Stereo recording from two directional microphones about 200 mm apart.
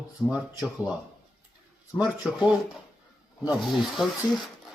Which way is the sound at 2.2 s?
5° right (ahead or behind).